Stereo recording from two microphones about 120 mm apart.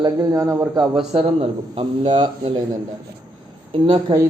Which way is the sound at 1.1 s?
55° right (ahead or behind).